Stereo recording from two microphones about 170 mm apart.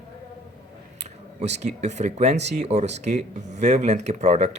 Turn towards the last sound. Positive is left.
turn(degrees=-40)  # may be behind; listen again after turning